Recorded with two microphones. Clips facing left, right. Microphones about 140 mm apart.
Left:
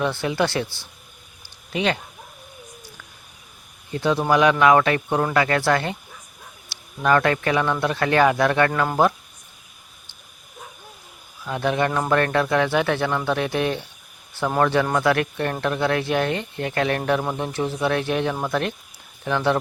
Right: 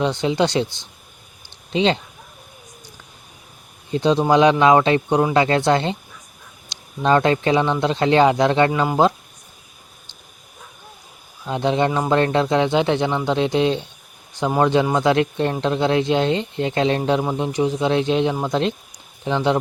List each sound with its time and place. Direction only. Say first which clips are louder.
0.0 s speech: right 3 dB; 20° right (ahead or behind)
3.9 s speech: right 4 dB; 20° right (ahead or behind)
11.4 s speech: right 3 dB; 20° right (ahead or behind)